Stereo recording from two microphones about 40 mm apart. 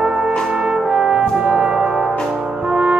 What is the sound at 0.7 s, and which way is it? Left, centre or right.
Brass instrument, right.